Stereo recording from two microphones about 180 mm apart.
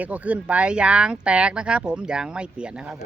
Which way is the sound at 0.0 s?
10° right (ahead or behind).